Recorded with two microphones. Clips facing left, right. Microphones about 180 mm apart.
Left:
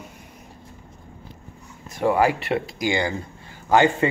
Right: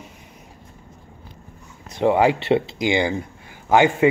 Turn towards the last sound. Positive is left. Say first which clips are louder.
# right 2 dB
turn(degrees=-15)  # may be behind; listen again after turning